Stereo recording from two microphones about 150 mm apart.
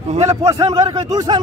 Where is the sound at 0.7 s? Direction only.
25° right (ahead or behind).